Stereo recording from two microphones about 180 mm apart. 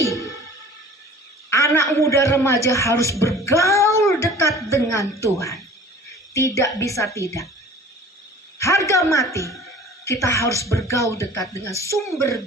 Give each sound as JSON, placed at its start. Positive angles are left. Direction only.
{"t": 0.0, "sound": "music", "side_deg": 15}
{"t": 1.5, "sound": "a sound", "side_deg": 15}
{"t": 6.3, "sound": "speech", "side_deg": 15}
{"t": 8.5, "sound": "a man's voice", "side_deg": 15}